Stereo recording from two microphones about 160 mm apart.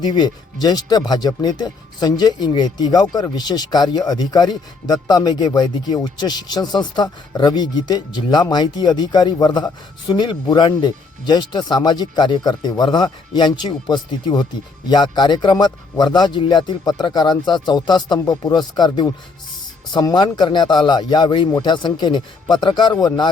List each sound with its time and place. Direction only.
0.0 s speech: 25° left (ahead or behind)